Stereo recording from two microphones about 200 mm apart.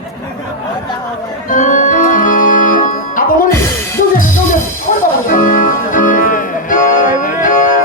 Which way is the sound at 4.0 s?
45° left (ahead or behind).